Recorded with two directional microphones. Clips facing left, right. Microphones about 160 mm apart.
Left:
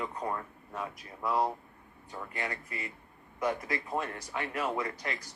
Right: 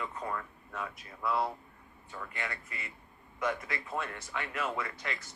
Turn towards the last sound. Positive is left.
turn(degrees=35)  # may be behind; listen again after turning